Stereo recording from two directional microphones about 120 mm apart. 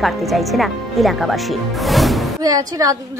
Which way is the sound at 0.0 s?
Centre (ahead or behind).